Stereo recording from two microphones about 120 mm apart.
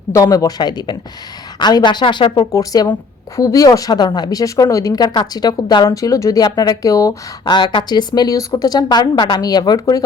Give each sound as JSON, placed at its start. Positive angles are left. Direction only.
{"t": 0.1, "sound": "speech", "side_deg": 30}